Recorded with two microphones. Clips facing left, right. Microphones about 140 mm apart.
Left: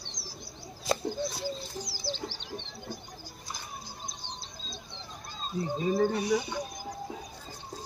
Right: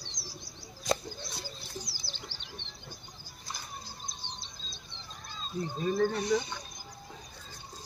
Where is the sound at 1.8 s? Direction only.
90° left.